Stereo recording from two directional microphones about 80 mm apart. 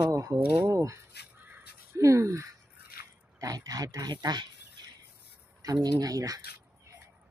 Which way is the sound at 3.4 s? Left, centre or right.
Right.